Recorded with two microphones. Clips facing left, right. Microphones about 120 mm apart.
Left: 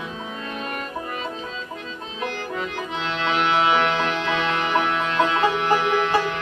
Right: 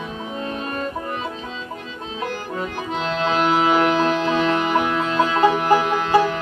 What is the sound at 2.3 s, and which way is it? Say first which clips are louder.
Accordion: right 1 dB; 40° right (ahead or behind).